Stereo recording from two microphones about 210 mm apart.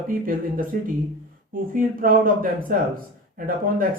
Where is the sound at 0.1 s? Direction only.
40° right (ahead or behind).